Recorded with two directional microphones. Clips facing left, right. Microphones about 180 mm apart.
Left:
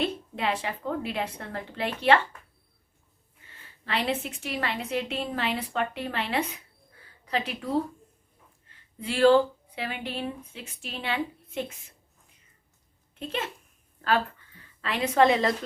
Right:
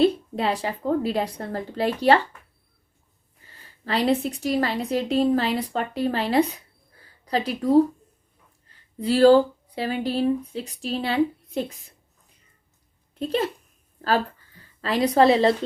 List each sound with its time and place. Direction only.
0.0 s a woman's voice: 35° right (ahead or behind)
3.4 s a woman's voice: 40° right (ahead or behind)
13.1 s a woman's voice: 35° right (ahead or behind)